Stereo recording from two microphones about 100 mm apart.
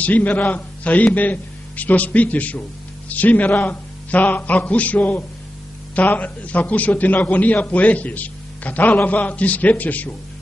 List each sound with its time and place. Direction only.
0.0 s a man's voice: 15° left (ahead or behind)